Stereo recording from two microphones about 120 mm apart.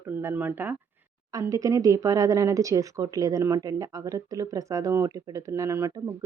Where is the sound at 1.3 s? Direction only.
30° right (ahead or behind).